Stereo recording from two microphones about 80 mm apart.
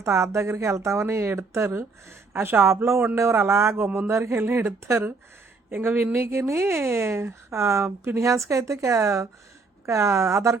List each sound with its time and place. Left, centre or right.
0.0 s speech: right
4.1 s speech: right